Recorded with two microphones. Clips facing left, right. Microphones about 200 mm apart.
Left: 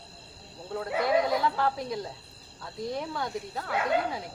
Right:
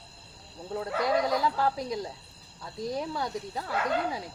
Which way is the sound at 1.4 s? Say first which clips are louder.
Even; 10° right (ahead or behind).